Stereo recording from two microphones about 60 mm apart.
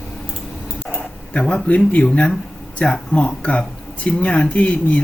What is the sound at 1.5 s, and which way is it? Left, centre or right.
Speech, left.